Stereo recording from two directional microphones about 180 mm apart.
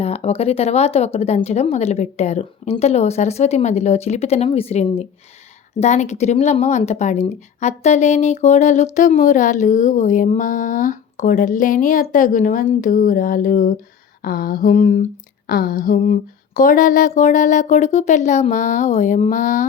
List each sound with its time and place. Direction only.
0.0 s speech: 35° left (ahead or behind)